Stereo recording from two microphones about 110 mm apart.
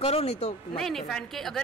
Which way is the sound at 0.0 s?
65° left (ahead or behind).